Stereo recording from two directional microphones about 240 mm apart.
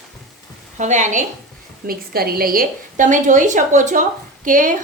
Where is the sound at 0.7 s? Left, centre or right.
Right.